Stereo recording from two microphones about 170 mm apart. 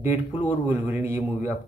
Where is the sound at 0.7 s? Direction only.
10° right (ahead or behind).